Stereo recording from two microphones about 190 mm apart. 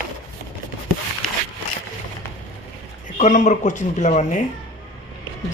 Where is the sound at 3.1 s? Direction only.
40° left (ahead or behind).